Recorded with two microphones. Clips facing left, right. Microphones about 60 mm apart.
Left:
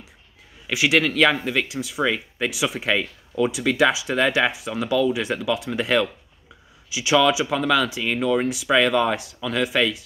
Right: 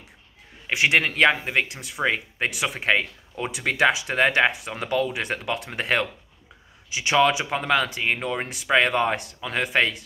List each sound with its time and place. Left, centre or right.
0.9 s speech: right
1.7 s speech: right
2.5 s speech: right
3.5 s speech: right
4.2 s speech: right
4.5 s speech: right